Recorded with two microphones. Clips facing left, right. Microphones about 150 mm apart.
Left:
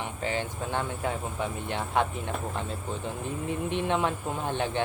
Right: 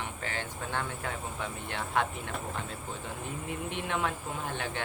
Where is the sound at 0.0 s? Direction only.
20° left (ahead or behind).